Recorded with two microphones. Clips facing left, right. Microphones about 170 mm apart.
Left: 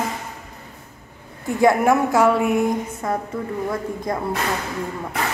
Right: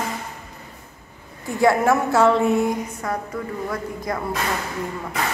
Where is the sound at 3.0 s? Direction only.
20° left (ahead or behind).